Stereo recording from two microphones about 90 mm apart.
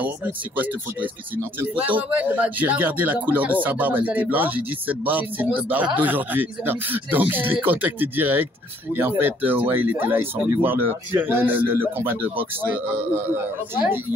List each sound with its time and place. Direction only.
0.0 s speech: 20° right (ahead or behind)